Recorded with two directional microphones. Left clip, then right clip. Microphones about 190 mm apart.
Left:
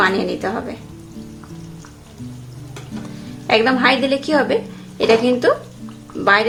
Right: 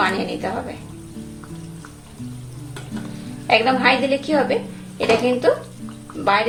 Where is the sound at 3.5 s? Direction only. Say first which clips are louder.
Left 1 dB; 30° left (ahead or behind).